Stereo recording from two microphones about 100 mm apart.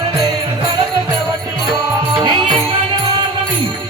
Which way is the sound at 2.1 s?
45° right (ahead or behind).